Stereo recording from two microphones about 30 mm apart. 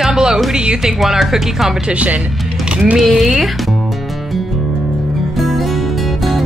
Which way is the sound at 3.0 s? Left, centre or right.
Centre.